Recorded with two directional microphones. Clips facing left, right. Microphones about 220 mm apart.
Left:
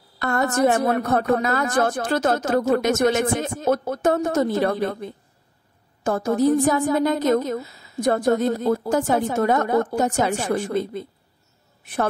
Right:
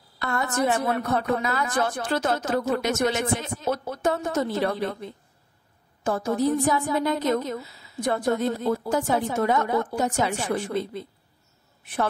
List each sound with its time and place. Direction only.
0.2 s a woman's voice: 45° left (ahead or behind)